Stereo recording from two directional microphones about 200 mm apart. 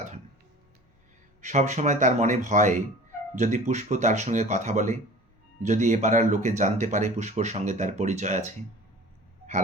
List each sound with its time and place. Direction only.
1.4 s speech: 35° right (ahead or behind)